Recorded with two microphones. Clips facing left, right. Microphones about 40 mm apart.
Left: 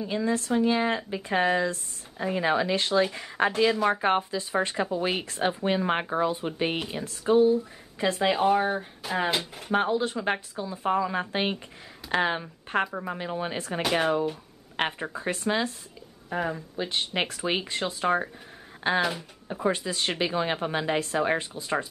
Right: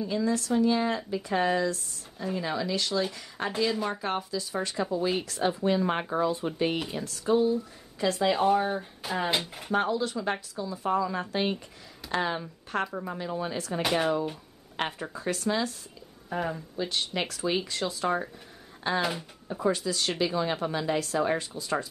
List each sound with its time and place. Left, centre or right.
0.0 s speech: left
9.3 s speech: centre
9.7 s speech: left
16.3 s speech: centre
16.7 s speech: left